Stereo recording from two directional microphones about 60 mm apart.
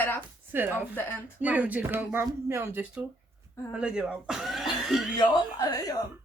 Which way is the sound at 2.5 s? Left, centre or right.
Right.